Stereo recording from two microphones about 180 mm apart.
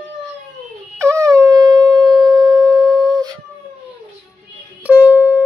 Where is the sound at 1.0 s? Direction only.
15° right (ahead or behind).